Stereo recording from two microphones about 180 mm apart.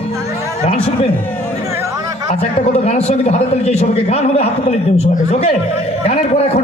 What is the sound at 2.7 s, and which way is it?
A man's voice, 35° left (ahead or behind).